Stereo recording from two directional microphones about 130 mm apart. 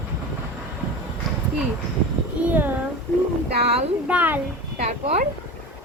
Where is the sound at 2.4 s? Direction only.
10° right (ahead or behind).